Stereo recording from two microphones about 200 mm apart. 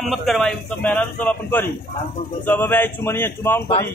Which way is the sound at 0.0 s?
Centre (ahead or behind).